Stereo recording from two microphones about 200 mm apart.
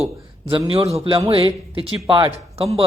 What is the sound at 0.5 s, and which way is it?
Speech, 25° right (ahead or behind).